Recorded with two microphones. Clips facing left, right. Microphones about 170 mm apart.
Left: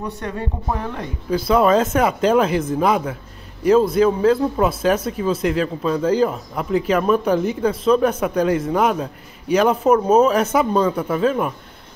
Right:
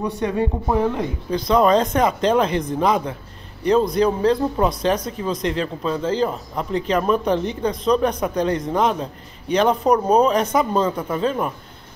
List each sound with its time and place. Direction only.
0.0 s speech: 15° right (ahead or behind)
1.3 s speech: 5° left (ahead or behind)